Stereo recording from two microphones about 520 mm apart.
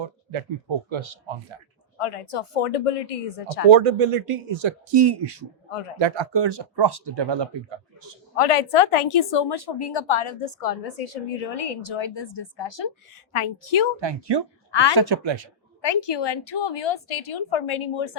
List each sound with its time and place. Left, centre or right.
0.0 s a sound: right
0.9 s speech: right
2.0 s speech: left
3.7 s speech: right
8.4 s a woman's voice: left
9.5 s a woman's voice: left
13.3 s a woman's voice: left
14.0 s speech: right
14.7 s speech: left
14.9 s speech: right
15.8 s a woman's voice: left